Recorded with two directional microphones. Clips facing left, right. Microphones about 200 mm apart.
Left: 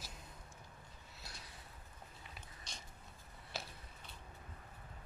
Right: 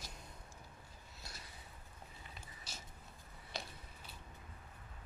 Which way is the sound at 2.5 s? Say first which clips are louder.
Right 1 dB; 5° right (ahead or behind).